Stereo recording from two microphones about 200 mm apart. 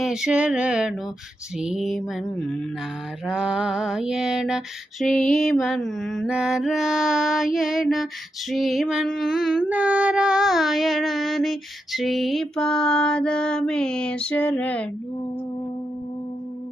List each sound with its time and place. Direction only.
0.0 s mantra: 5° right (ahead or behind)